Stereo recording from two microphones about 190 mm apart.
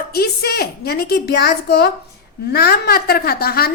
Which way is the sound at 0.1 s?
55° left (ahead or behind).